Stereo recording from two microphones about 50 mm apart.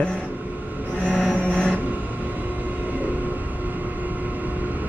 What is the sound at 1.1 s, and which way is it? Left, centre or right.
Vehicle, centre.